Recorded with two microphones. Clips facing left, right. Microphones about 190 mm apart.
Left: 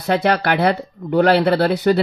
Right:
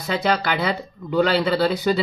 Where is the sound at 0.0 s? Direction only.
65° left (ahead or behind).